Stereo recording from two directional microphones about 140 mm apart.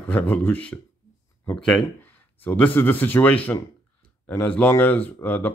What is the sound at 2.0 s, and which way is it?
Speech, 10° left (ahead or behind).